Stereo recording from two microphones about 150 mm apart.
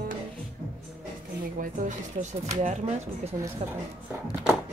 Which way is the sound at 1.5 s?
60° right (ahead or behind).